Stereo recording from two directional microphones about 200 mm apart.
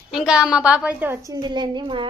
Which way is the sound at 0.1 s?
5° right (ahead or behind).